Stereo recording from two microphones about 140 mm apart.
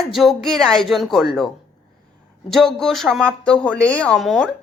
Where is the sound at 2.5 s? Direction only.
Centre (ahead or behind).